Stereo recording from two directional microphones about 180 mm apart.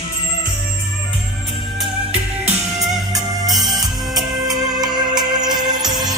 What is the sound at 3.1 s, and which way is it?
Music, 20° right (ahead or behind).